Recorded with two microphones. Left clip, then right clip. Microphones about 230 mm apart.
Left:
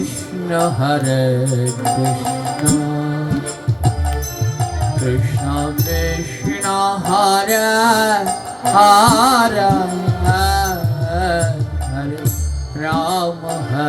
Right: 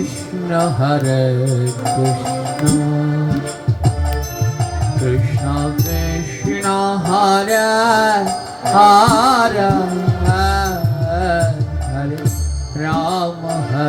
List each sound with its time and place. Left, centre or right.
0.5 s music: left
5.5 s music: left
12.8 s music: left